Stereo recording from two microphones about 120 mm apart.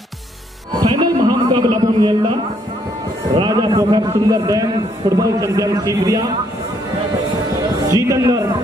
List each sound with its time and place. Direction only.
0.7 s a sound: 30° right (ahead or behind)
3.3 s a man's voice: 35° right (ahead or behind)
7.9 s a man's voice: 25° right (ahead or behind)